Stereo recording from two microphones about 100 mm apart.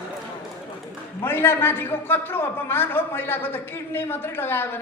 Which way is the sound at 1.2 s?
20° left (ahead or behind).